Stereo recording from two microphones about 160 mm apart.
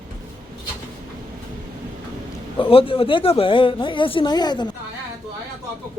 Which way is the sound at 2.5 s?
35° left (ahead or behind).